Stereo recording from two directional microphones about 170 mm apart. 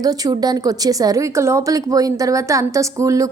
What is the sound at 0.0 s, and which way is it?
A woman's voice, 20° right (ahead or behind).